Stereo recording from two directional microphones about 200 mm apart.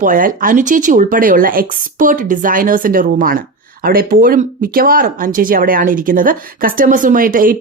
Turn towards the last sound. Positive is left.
turn(degrees=-45)  # may be behind; listen again after turning